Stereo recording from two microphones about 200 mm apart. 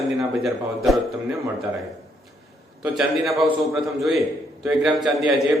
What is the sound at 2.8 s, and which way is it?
Speech, centre (ahead or behind).